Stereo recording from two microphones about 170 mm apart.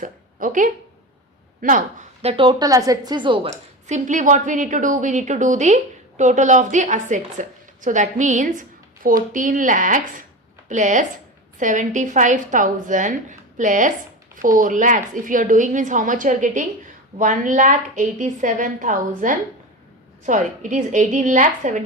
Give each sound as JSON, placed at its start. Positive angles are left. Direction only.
{"t": 0.0, "sound": "a woman's voice", "side_deg": -50}
{"t": 2.3, "sound": "speech", "side_deg": -30}
{"t": 3.8, "sound": "a woman's voice", "side_deg": -45}